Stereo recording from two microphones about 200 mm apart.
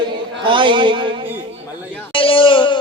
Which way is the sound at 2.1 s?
25° left (ahead or behind).